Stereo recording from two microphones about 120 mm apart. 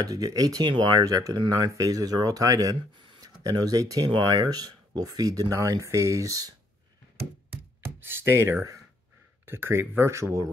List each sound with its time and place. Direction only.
0.0 s speech: 30° right (ahead or behind)
3.0 s a sound: 45° right (ahead or behind)
3.4 s speech: 30° right (ahead or behind)
8.0 s speech: 20° right (ahead or behind)